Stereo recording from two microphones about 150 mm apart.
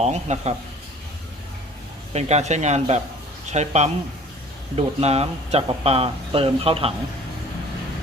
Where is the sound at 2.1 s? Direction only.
50° right (ahead or behind).